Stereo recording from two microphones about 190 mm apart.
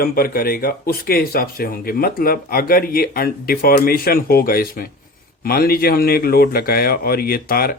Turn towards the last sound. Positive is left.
turn(degrees=50)  # may be behind; listen again after turning